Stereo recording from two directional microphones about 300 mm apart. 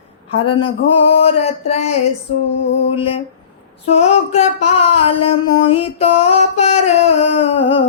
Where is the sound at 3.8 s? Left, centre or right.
Left.